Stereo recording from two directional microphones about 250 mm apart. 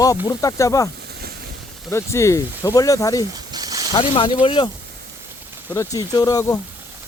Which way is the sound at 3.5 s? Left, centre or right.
Centre.